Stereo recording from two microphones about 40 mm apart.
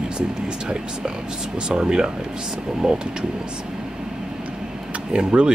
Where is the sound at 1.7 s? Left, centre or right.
Centre.